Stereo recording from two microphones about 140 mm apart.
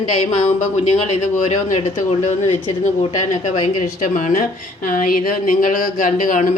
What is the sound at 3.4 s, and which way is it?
A woman's voice, 55° left (ahead or behind).